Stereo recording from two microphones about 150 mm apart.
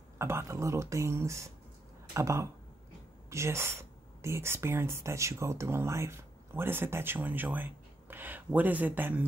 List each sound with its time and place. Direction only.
0.2 s speech: 15° right (ahead or behind)